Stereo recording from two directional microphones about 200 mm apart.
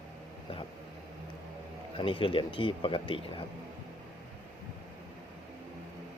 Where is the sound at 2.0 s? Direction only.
25° left (ahead or behind).